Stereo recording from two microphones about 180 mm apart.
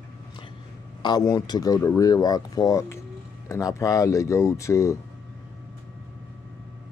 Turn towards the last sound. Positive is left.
turn(degrees=15)  # may be behind; listen again after turning